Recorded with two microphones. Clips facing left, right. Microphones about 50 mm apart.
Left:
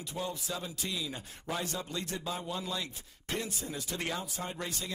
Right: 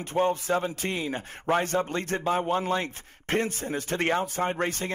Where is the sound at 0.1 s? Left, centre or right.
Right.